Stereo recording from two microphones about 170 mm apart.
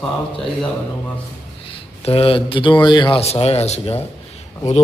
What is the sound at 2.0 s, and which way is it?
A man's voice, 35° left (ahead or behind).